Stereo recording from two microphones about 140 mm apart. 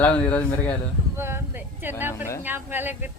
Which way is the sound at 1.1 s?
15° right (ahead or behind).